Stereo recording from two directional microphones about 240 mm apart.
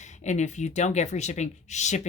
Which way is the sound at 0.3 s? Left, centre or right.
Left.